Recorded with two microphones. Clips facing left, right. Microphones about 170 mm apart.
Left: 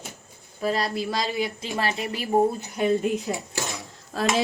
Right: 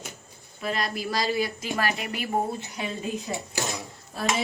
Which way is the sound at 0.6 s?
35° left (ahead or behind).